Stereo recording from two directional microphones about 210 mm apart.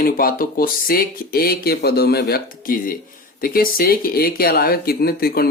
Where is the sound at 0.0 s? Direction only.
45° left (ahead or behind).